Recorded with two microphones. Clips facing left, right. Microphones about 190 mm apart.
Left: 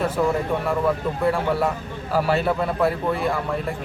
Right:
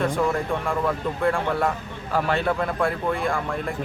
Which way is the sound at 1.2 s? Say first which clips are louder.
Left 1 dB; 5° left (ahead or behind).